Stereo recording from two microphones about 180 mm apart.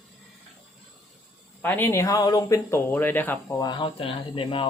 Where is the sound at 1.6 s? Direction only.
10° left (ahead or behind).